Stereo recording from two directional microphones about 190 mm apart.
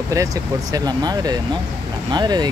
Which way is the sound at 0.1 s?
15° right (ahead or behind).